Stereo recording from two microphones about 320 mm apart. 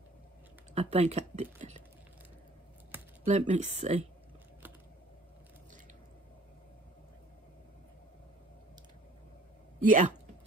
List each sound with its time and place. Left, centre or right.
0.7 s speech: centre
3.3 s speech: right
9.8 s speech: right